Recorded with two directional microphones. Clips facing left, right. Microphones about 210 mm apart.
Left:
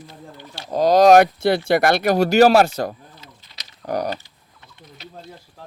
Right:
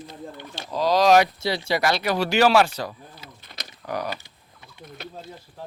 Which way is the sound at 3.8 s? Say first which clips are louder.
Left 5 dB; 40° left (ahead or behind).